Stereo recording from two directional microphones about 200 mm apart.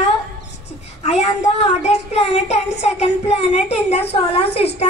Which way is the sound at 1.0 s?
35° left (ahead or behind).